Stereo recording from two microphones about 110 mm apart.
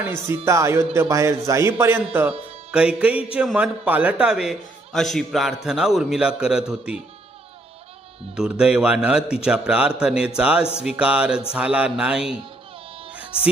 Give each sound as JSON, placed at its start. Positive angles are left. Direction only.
{"t": 0.4, "sound": "speech", "side_deg": -25}
{"t": 2.7, "sound": "a man's voice", "side_deg": -10}
{"t": 8.4, "sound": "a man's voice", "side_deg": -5}